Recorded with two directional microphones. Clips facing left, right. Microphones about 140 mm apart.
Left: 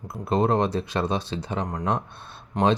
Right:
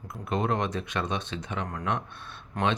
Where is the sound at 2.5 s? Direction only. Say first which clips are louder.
Left 6 dB; 20° left (ahead or behind).